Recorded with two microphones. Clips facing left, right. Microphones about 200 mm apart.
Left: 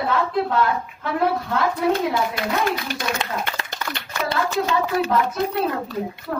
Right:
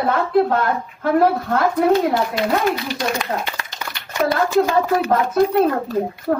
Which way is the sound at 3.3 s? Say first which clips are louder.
Right 2 dB; 60° right (ahead or behind).